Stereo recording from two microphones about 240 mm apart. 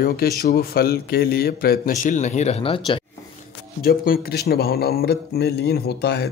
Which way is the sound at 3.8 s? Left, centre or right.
Left.